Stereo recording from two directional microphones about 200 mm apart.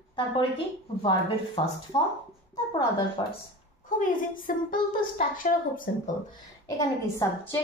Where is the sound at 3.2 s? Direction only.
20° left (ahead or behind).